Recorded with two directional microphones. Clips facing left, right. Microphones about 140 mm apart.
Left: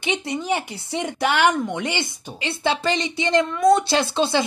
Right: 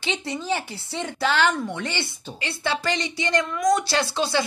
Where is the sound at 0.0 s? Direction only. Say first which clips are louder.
Left 3 dB; 15° left (ahead or behind).